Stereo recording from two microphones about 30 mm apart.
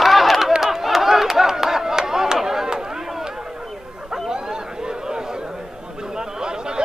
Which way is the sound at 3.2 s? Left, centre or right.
Right.